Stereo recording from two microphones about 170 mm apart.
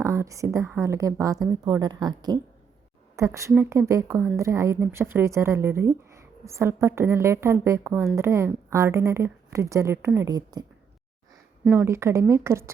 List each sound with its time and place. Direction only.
0.0 s a woman's voice: 20° right (ahead or behind)
11.7 s speech: 15° right (ahead or behind)